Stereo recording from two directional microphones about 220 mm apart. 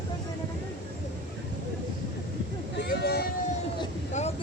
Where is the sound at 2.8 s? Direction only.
50° left (ahead or behind).